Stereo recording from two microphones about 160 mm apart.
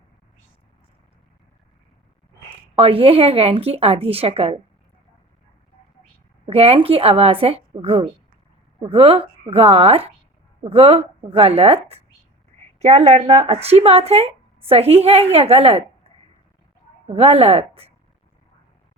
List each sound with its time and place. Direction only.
2.7 s speech: 35° right (ahead or behind)
6.4 s speech: 40° right (ahead or behind)
17.2 s speech: 35° right (ahead or behind)